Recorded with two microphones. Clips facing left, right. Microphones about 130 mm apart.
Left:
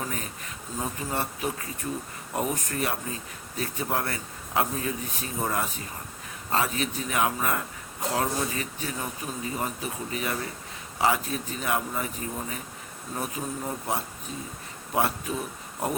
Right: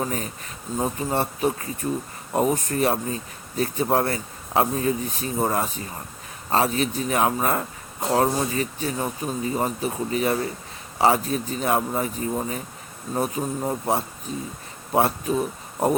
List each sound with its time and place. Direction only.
0.0 s speech: 35° right (ahead or behind)